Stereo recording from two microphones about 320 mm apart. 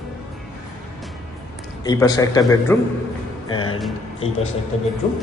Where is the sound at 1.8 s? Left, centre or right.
Centre.